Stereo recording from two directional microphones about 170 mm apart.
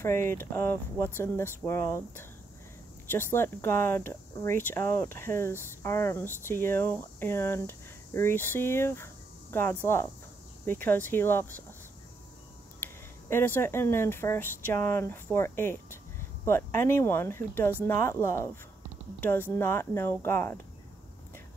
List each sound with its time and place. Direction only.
0.0 s speech: 15° left (ahead or behind)
12.8 s speech: 15° left (ahead or behind)